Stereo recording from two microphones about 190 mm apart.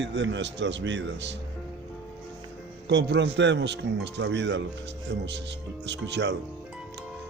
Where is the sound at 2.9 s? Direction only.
65° right (ahead or behind).